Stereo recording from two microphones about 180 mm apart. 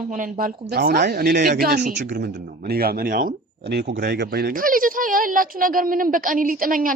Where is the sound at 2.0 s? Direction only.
70° right (ahead or behind).